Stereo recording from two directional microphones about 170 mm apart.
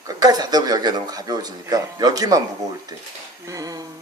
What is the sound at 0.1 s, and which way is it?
Speech, 25° right (ahead or behind).